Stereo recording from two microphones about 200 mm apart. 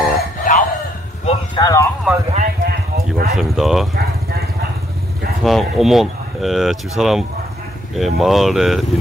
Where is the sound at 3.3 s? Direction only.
Centre (ahead or behind).